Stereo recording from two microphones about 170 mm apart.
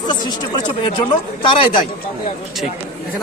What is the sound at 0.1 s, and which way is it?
Speech, 25° left (ahead or behind).